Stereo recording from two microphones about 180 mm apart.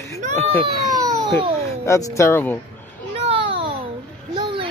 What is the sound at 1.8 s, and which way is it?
Speech, 15° left (ahead or behind).